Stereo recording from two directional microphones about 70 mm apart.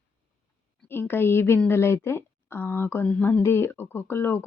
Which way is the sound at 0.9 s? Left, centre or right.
Left.